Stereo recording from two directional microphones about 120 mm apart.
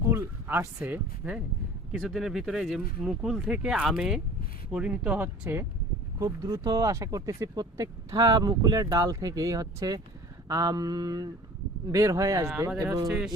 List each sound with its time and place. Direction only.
0.1 s a sound: 20° right (ahead or behind)
0.9 s speech: 15° right (ahead or behind)
1.9 s speech: 5° right (ahead or behind)
6.1 s speech: 30° right (ahead or behind)
13.1 s speech: 5° right (ahead or behind)